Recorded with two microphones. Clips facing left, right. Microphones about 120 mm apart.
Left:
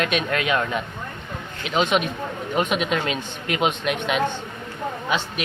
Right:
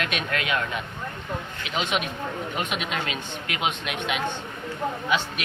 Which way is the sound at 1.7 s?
35° left (ahead or behind).